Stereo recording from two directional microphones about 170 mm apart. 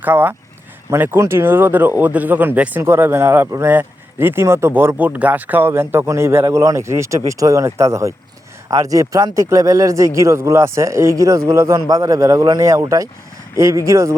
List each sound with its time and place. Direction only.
0.0 s a man's voice: 10° right (ahead or behind)